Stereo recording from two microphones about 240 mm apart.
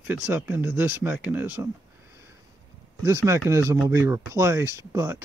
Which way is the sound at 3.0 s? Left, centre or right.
Centre.